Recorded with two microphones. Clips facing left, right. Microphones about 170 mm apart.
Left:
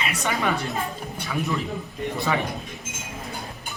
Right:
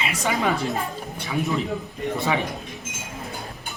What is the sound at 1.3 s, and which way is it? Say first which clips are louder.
Speech: right 2 dB; 20° right (ahead or behind).